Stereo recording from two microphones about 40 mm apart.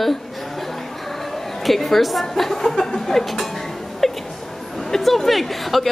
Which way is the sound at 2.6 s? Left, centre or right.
Centre.